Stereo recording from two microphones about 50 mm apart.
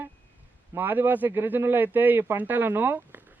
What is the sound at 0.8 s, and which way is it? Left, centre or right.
Speech, right.